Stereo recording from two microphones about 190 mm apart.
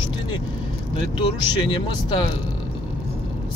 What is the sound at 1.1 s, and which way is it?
Speech, 25° left (ahead or behind).